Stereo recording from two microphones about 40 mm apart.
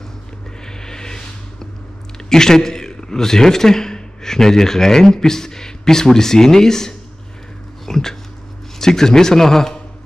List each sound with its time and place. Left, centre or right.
0.7 s a sound: centre
2.2 s a man's voice: centre
7.8 s dog: centre
8.7 s speech: centre